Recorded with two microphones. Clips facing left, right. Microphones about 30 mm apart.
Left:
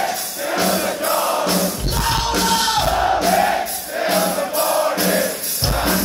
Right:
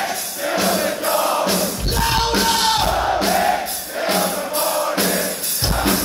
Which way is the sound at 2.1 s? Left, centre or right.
Right.